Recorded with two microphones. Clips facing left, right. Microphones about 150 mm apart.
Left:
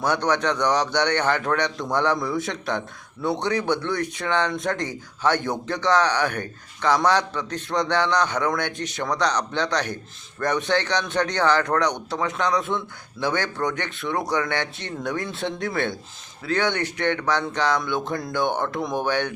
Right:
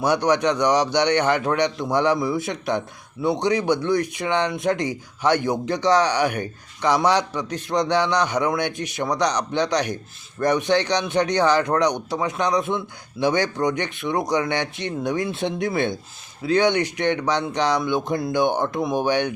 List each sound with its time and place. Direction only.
0.0 s a man's voice: 15° right (ahead or behind)